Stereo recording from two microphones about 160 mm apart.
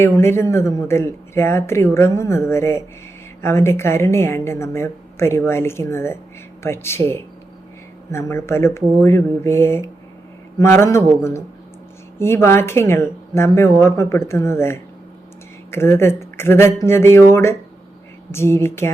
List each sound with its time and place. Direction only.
0.0 s speech: 15° left (ahead or behind)
8.1 s speech: 15° left (ahead or behind)
18.3 s speech: 15° left (ahead or behind)